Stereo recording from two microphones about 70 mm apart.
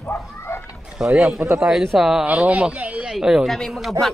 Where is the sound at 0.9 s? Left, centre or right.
Centre.